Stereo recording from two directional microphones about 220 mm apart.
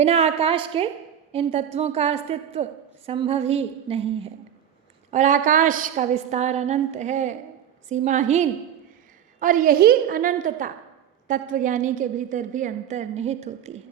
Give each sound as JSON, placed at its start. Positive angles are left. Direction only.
{"t": 0.0, "sound": "a woman's voice", "side_deg": -30}